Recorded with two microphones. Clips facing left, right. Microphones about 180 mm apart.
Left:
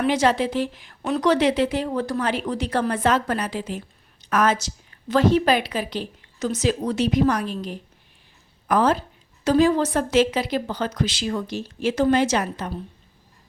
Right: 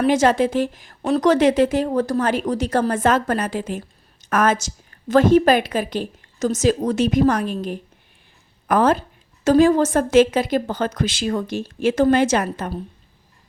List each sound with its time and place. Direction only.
0.0 s a woman's voice: 45° right (ahead or behind)